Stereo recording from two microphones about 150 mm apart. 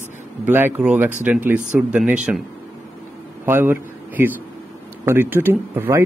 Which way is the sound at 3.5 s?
15° right (ahead or behind).